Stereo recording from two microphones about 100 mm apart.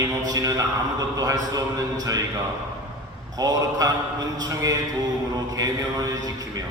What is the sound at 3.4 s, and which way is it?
Speech, 40° right (ahead or behind).